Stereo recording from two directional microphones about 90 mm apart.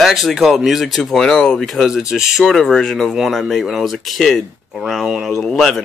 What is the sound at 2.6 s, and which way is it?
Speech, 5° left (ahead or behind).